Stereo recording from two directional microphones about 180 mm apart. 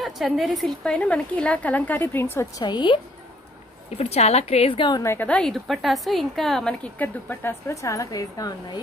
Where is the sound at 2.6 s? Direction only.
25° left (ahead or behind).